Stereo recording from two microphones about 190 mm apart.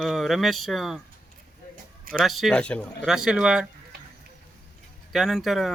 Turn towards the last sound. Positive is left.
turn(degrees=0)  # may be behind; listen again after turning